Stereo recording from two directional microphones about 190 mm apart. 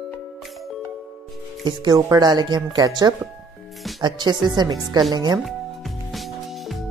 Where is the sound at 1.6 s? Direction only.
20° right (ahead or behind).